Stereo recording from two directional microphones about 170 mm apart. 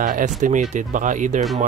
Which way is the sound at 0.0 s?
50° right (ahead or behind).